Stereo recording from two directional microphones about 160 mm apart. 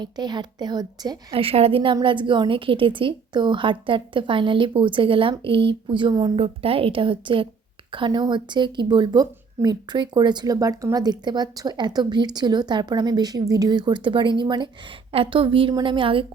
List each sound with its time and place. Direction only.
0.0 s a woman's voice: 25° right (ahead or behind)
1.3 s a woman's voice: 35° right (ahead or behind)